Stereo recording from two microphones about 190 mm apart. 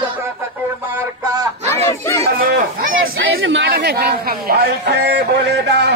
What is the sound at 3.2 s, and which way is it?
Speech, 90° right.